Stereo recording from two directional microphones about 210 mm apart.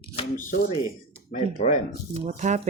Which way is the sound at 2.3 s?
35° right (ahead or behind).